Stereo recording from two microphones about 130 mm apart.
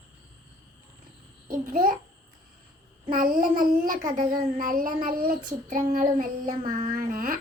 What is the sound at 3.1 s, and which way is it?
Child singing, 90° right.